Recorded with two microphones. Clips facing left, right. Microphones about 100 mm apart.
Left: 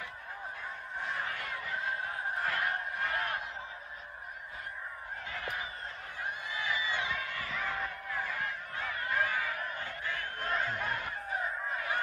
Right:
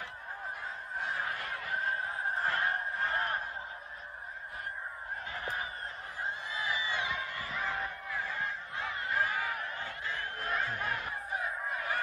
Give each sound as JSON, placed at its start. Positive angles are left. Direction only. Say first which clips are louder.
{"t": 2.4, "sound": "honk", "louder": "right 1 dB", "side_deg": -30}
{"t": 5.3, "sound": "fowl", "louder": "even", "side_deg": -30}
{"t": 7.3, "sound": "a sound", "louder": "even", "side_deg": -25}
{"t": 8.3, "sound": "honk", "louder": "even", "side_deg": -30}
{"t": 9.8, "sound": "crowd", "louder": "even", "side_deg": -20}
{"t": 10.5, "sound": "a sound", "louder": "left 1 dB", "side_deg": -5}